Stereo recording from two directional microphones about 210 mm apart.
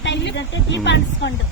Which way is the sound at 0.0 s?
60° left (ahead or behind).